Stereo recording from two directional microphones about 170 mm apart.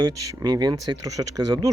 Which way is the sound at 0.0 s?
20° right (ahead or behind).